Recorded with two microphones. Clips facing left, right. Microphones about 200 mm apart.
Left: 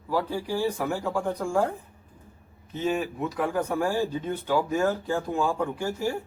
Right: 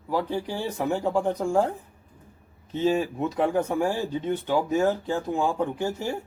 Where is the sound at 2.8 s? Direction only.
25° right (ahead or behind).